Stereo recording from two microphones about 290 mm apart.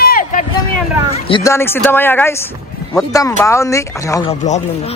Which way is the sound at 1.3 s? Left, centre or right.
Centre.